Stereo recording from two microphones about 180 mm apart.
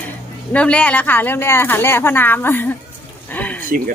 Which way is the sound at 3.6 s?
50° right (ahead or behind).